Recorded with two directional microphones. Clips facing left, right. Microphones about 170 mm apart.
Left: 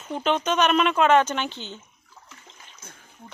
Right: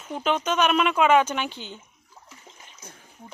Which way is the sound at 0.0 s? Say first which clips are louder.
Left 1 dB; 5° right (ahead or behind).